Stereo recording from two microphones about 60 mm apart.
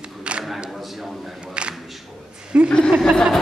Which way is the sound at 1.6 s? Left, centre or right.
Centre.